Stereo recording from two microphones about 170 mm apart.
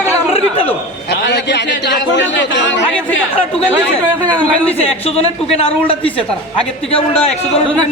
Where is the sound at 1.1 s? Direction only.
85° left.